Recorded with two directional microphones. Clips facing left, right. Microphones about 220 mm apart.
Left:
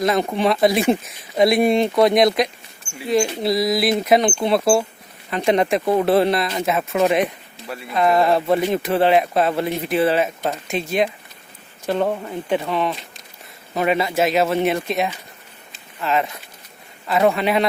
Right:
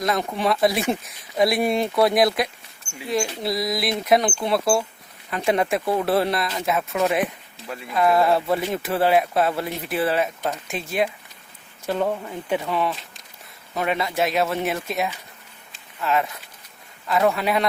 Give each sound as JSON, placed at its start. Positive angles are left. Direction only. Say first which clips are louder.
{"t": 0.0, "sound": "speech", "louder": "left 5 dB", "side_deg": 0}
{"t": 4.4, "sound": "speech", "louder": "left 4 dB", "side_deg": 25}
{"t": 5.3, "sound": "speech", "louder": "left 4 dB", "side_deg": -5}
{"t": 5.8, "sound": "speech", "louder": "left 5 dB", "side_deg": 15}
{"t": 6.1, "sound": "speech", "louder": "left 5 dB", "side_deg": 0}
{"t": 11.9, "sound": "speech", "louder": "left 3 dB", "side_deg": 15}
{"t": 13.7, "sound": "speech", "louder": "left 4 dB", "side_deg": 5}
{"t": 16.0, "sound": "speech", "louder": "left 2 dB", "side_deg": 0}